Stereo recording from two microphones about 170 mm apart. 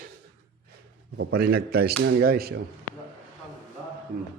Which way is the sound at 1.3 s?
70° right (ahead or behind).